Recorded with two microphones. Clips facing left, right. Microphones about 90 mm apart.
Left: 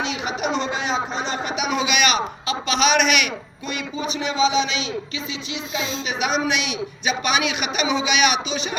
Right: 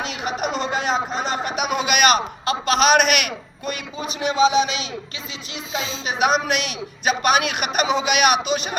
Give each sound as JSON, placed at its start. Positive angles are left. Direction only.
{"t": 0.0, "sound": "a sound", "side_deg": -45}
{"t": 1.1, "sound": "a man's voice", "side_deg": -50}
{"t": 6.1, "sound": "a man's voice", "side_deg": -45}